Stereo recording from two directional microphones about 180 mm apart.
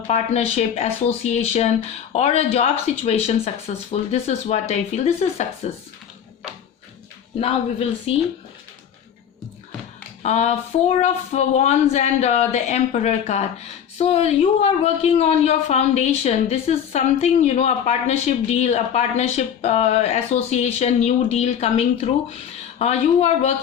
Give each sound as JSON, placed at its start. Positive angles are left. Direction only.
{"t": 0.1, "sound": "a woman's voice", "side_deg": 40}
{"t": 7.3, "sound": "a woman's voice", "side_deg": 35}
{"t": 10.2, "sound": "a woman's voice", "side_deg": 40}